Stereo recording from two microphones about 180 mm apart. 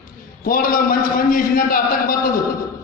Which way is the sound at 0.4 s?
50° left (ahead or behind).